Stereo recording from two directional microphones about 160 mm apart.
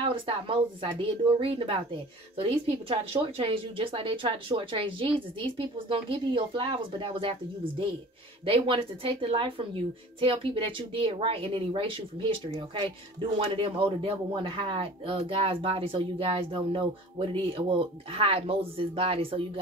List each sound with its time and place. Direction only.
0.1 s speech: 35° right (ahead or behind)